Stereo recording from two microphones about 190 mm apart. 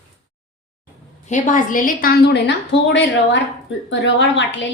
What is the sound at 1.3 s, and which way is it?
A woman's voice, 45° left (ahead or behind).